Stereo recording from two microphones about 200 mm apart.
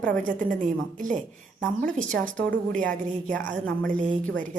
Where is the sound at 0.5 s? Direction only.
40° right (ahead or behind).